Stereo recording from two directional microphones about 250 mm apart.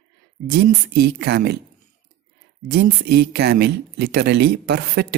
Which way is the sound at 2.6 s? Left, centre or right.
Right.